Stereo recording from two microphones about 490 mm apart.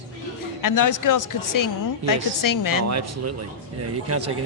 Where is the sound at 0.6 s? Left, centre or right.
Left.